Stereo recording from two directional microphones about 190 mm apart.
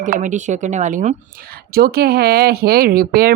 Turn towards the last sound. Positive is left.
turn(degrees=-50)  # may be behind; listen again after turning